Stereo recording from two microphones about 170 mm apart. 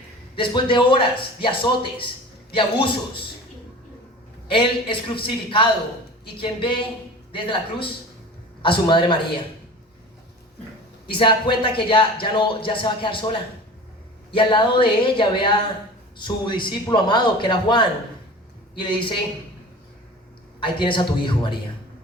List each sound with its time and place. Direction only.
0.3 s speech: 30° left (ahead or behind)
4.4 s speech: 30° left (ahead or behind)
11.1 s speech: 30° left (ahead or behind)
20.6 s speech: 30° left (ahead or behind)